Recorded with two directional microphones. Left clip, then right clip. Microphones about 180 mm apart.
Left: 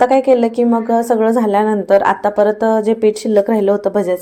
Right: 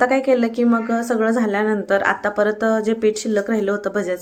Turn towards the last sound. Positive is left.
turn(degrees=20)  # may be behind; listen again after turning